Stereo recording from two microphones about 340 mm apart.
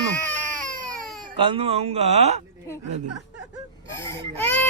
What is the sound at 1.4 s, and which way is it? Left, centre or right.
Speech, centre.